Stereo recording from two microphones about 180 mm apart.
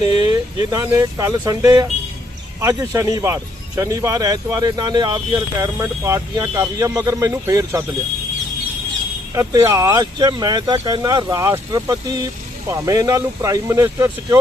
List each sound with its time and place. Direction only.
0.2 s speech: 20° right (ahead or behind)
9.3 s speech: 15° right (ahead or behind)